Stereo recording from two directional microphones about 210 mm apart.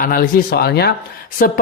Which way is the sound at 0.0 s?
45° left (ahead or behind).